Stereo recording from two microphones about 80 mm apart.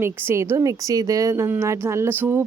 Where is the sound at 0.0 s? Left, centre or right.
Right.